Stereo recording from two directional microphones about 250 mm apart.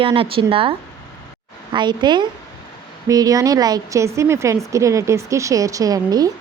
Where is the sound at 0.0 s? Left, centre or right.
Right.